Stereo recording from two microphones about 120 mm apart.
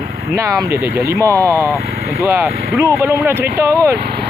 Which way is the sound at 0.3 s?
25° right (ahead or behind).